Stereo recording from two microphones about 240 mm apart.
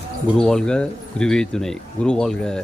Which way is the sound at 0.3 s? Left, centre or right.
Centre.